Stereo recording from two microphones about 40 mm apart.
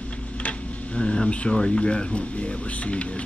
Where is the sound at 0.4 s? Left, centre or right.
Left.